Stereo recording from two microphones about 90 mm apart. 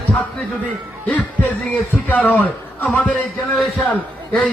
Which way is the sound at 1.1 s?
15° left (ahead or behind).